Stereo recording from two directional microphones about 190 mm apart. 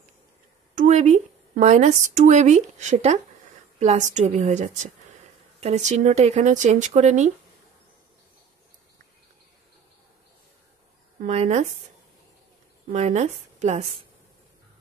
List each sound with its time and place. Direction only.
0.7 s speech: 40° right (ahead or behind)
11.2 s speech: 35° right (ahead or behind)
12.9 s speech: 35° right (ahead or behind)